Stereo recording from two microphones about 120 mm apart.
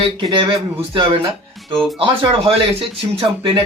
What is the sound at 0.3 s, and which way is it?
Speech, 45° right (ahead or behind).